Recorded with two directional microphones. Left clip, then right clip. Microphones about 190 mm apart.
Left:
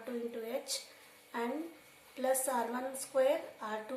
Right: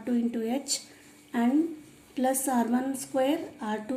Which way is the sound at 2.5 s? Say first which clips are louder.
Right 7 dB; 40° right (ahead or behind).